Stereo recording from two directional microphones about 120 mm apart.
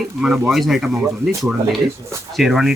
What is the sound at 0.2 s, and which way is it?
Speech, centre (ahead or behind).